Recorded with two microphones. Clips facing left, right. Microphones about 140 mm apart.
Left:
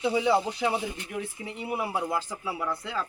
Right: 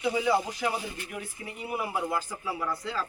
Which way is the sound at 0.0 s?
25° left (ahead or behind).